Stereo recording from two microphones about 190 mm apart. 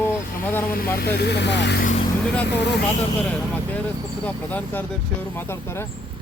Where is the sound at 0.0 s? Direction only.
10° left (ahead or behind).